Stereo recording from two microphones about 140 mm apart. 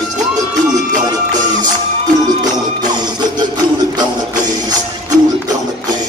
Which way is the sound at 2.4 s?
30° right (ahead or behind).